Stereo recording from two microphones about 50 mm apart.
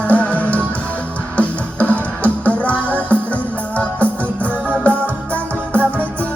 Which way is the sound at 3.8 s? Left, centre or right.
Left.